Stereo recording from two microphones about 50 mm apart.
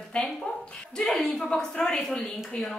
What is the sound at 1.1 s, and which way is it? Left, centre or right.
A woman's voice, centre.